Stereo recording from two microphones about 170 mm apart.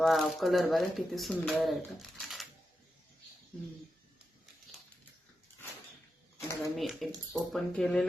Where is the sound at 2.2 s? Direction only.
Centre (ahead or behind).